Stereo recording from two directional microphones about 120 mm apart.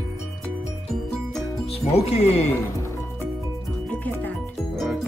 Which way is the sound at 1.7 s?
60° left (ahead or behind).